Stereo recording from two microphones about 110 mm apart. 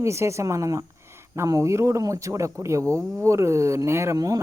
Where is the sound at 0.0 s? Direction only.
25° right (ahead or behind).